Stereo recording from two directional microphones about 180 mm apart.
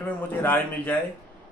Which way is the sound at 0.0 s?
10° left (ahead or behind).